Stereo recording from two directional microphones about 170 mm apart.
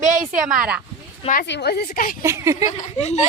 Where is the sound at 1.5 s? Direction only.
75° left (ahead or behind).